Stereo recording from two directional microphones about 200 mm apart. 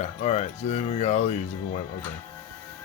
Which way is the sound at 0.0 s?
35° left (ahead or behind).